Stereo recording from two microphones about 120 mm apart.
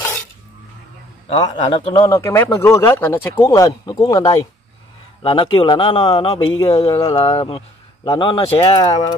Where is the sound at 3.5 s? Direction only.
30° left (ahead or behind).